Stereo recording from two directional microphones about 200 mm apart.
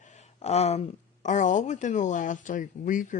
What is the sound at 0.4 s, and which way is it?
Speech, 30° left (ahead or behind).